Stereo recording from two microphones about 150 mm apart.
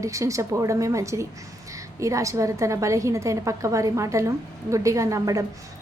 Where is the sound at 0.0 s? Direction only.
20° right (ahead or behind).